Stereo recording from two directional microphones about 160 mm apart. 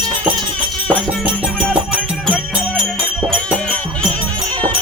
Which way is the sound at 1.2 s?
10° right (ahead or behind).